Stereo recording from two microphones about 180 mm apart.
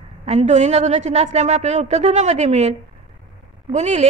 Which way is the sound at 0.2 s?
40° right (ahead or behind).